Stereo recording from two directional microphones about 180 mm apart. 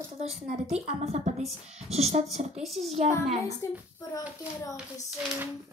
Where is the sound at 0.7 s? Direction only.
35° right (ahead or behind).